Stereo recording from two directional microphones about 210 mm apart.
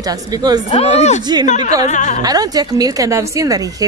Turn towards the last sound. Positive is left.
turn(degrees=-15)  # may be behind; listen again after turning